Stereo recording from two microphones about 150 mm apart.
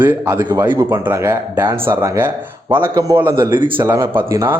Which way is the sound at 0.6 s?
15° right (ahead or behind).